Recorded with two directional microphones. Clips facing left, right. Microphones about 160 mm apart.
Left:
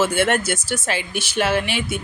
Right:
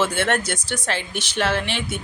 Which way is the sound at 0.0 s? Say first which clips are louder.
Left 3 dB; 10° left (ahead or behind).